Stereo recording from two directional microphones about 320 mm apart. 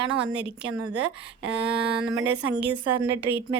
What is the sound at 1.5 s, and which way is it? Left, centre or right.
Speech, right.